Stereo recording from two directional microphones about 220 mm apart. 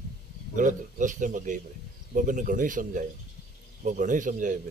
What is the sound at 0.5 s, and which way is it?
A man's voice, 35° right (ahead or behind).